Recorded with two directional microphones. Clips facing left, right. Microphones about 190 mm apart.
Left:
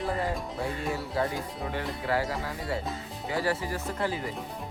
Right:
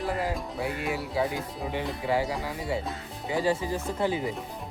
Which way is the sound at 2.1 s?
15° right (ahead or behind).